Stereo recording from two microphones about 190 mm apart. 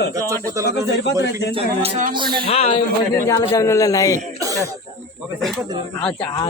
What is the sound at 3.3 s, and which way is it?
Speech, 15° left (ahead or behind).